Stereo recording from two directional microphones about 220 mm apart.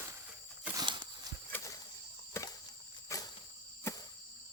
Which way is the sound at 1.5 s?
15° left (ahead or behind).